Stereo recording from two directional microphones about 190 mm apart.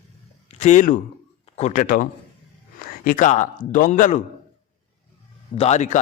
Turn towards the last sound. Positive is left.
turn(degrees=35)  # may be behind; listen again after turning